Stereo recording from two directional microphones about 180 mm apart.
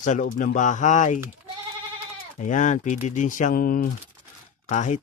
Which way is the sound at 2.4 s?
45° left (ahead or behind).